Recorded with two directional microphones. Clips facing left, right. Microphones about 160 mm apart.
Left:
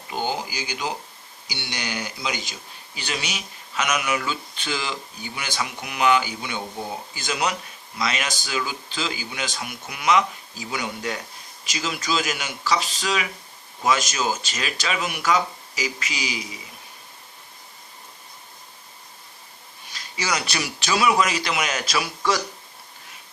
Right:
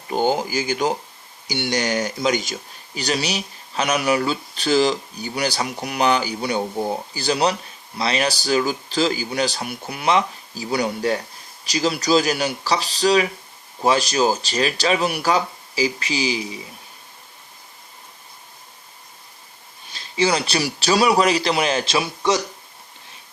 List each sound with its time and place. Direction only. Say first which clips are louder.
0.1 s speech: right 7 dB; 50° right (ahead or behind); by 16.6 s 30° right (ahead or behind)
19.9 s speech: right 7 dB; 30° right (ahead or behind)